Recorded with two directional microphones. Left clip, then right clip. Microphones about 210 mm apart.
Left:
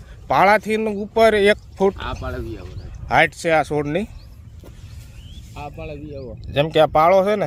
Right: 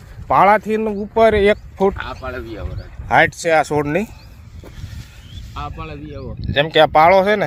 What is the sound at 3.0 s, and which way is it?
Speech, centre (ahead or behind).